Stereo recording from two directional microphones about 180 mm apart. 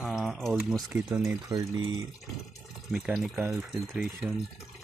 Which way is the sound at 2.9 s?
Centre (ahead or behind).